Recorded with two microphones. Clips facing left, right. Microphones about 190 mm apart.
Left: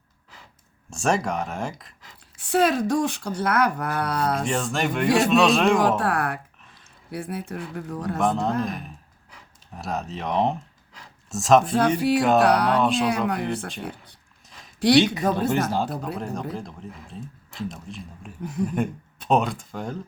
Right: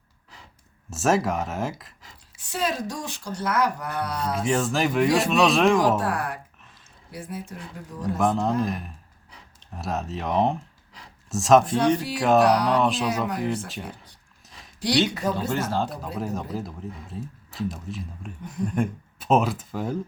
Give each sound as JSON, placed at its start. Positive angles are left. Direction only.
{"t": 0.9, "sound": "a man's voice", "side_deg": -5}
{"t": 2.4, "sound": "speech", "side_deg": 60}
{"t": 4.4, "sound": "a man's voice", "side_deg": 0}
{"t": 6.0, "sound": "speech", "side_deg": 60}
{"t": 8.2, "sound": "a man's voice", "side_deg": 0}
{"t": 14.8, "sound": "speech", "side_deg": 60}
{"t": 15.4, "sound": "speech", "side_deg": 15}
{"t": 16.1, "sound": "a man's voice", "side_deg": -5}